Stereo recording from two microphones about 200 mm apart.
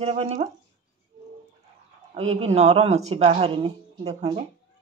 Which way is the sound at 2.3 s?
35° right (ahead or behind).